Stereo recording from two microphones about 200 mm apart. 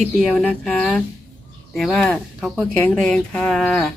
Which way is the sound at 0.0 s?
5° left (ahead or behind).